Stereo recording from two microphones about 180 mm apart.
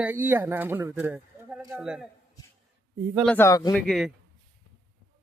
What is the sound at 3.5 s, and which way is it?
Speech, 20° left (ahead or behind).